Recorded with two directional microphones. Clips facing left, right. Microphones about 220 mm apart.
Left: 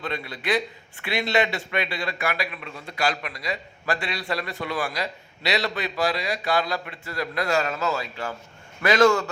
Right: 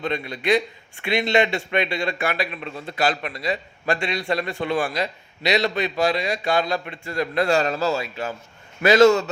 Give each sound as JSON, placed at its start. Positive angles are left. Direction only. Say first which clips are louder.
{"t": 0.0, "sound": "a man's voice", "louder": "right 5 dB", "side_deg": -25}